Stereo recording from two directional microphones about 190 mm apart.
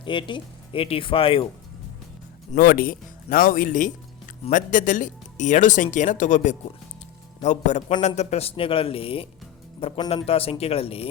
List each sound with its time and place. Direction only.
0.0 s speech: 25° left (ahead or behind)
2.5 s speech: 45° left (ahead or behind); by 11.1 s 30° left (ahead or behind)